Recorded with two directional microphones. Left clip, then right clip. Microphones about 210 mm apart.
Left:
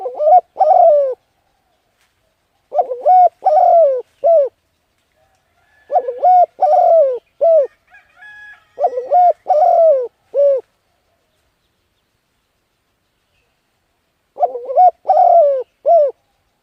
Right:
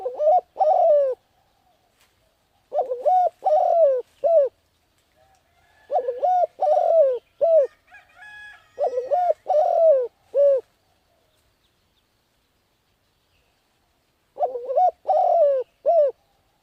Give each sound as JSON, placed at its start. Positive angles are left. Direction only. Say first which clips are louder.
{"t": 0.0, "sound": "bird", "louder": "left 8 dB", "side_deg": 15}
{"t": 2.6, "sound": "bird", "louder": "left 8 dB", "side_deg": 15}
{"t": 5.9, "sound": "bird", "louder": "left 9 dB", "side_deg": 15}
{"t": 7.7, "sound": "crowing", "louder": "left 3 dB", "side_deg": -50}
{"t": 8.7, "sound": "bird", "louder": "left 8 dB", "side_deg": 10}
{"t": 14.3, "sound": "bird", "louder": "left 8 dB", "side_deg": 15}